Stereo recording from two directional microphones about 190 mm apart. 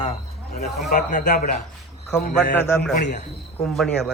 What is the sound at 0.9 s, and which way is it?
Speech, 45° left (ahead or behind).